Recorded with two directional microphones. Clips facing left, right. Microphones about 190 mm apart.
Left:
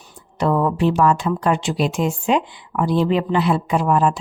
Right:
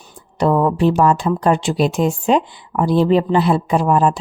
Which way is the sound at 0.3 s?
35° right (ahead or behind).